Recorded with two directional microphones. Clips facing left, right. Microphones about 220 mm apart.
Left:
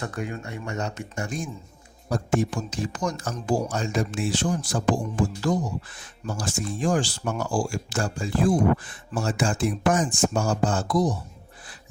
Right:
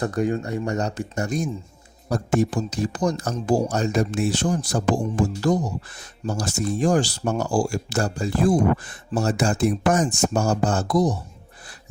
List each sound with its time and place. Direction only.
0.0 s speech: 35° right (ahead or behind)